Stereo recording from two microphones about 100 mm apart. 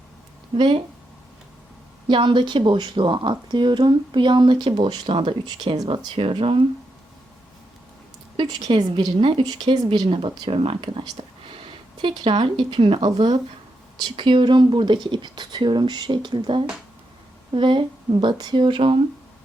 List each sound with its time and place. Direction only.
2.0 s a woman's voice: 55° right (ahead or behind)
8.7 s a woman's voice: 45° right (ahead or behind)
9.1 s speech: 60° right (ahead or behind)
9.4 s speech: 45° right (ahead or behind); by 11.0 s 65° right (ahead or behind)
12.0 s a woman's voice: 55° right (ahead or behind)